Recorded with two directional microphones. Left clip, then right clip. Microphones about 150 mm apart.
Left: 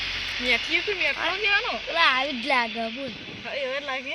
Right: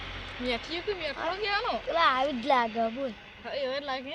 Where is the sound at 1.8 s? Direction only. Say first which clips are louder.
Left 2 dB; 15° right (ahead or behind).